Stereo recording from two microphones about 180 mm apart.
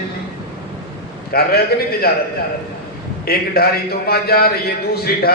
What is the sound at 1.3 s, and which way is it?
Speech, 60° left (ahead or behind).